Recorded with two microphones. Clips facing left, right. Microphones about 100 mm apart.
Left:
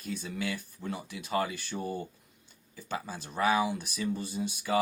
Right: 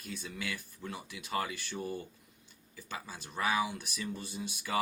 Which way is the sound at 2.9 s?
40° left (ahead or behind).